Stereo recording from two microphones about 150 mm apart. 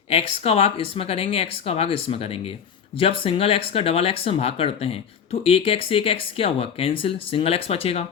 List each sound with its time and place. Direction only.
0.1 s speech: 40° left (ahead or behind)